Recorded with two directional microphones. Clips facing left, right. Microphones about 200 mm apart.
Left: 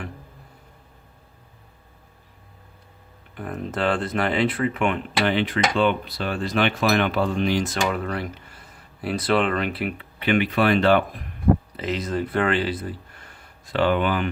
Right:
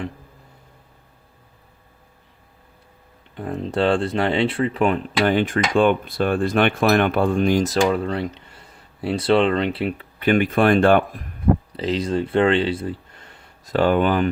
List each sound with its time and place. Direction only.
3.3 s speech: 30° right (ahead or behind)
10.2 s speech: 45° right (ahead or behind)
11.8 s speech: 30° right (ahead or behind)
13.7 s speech: 45° right (ahead or behind)